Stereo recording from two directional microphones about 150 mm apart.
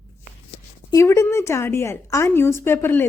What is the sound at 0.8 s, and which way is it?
A woman's voice, 20° left (ahead or behind).